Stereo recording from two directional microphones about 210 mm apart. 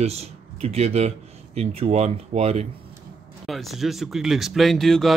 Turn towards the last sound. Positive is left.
turn(degrees=0)  # may be behind; listen again after turning